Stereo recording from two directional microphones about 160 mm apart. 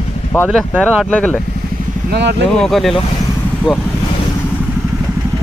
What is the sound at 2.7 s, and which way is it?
Speech, centre (ahead or behind).